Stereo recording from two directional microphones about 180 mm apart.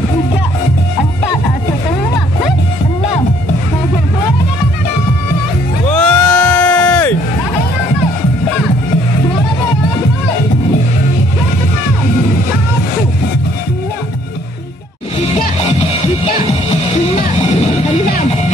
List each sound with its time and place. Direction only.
5.9 s bleat: 5° left (ahead or behind)